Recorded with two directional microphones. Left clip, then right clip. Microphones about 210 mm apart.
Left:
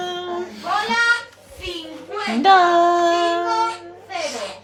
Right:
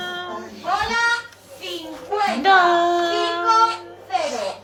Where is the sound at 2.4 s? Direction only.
40° left (ahead or behind).